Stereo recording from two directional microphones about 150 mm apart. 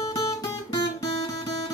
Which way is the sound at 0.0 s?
25° left (ahead or behind).